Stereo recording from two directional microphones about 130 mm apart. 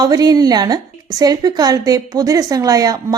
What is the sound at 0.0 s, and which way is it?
A woman's voice, 30° right (ahead or behind).